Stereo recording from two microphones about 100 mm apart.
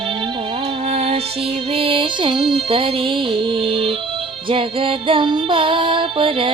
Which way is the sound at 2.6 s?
65° right (ahead or behind).